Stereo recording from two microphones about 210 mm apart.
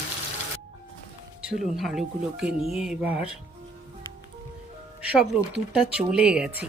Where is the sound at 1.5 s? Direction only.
Centre (ahead or behind).